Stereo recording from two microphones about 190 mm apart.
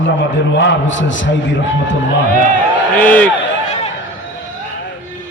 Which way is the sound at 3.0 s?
10° left (ahead or behind).